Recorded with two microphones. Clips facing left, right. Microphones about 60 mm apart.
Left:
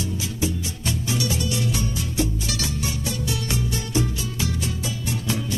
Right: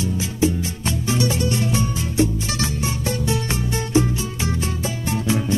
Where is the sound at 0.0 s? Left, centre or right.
Right.